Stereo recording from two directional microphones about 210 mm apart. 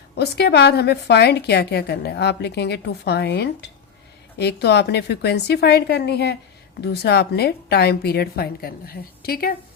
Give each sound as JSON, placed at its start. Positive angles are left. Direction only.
{"t": 0.2, "sound": "a woman's voice", "side_deg": 50}